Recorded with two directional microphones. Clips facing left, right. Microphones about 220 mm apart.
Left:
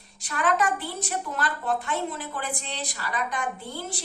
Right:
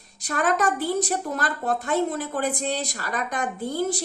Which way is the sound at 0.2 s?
40° right (ahead or behind).